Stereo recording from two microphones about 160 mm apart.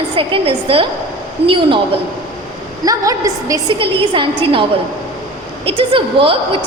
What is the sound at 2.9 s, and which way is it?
Speech, 20° right (ahead or behind).